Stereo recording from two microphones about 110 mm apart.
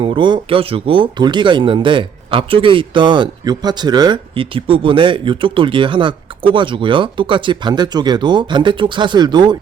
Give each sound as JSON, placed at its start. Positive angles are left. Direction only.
{"t": 0.0, "sound": "speech", "side_deg": -50}